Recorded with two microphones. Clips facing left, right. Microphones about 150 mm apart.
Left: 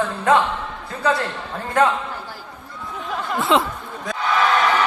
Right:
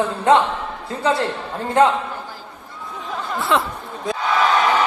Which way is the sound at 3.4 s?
20° left (ahead or behind).